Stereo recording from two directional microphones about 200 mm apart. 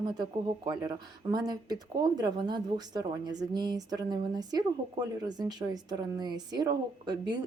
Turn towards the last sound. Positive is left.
turn(degrees=-20)  # may be behind; listen again after turning